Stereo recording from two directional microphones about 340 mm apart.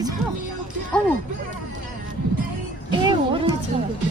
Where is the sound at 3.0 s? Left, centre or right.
Centre.